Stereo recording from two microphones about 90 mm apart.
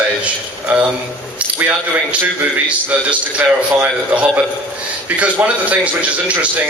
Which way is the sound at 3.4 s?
20° right (ahead or behind).